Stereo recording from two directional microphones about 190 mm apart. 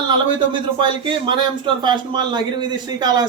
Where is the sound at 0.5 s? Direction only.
25° right (ahead or behind).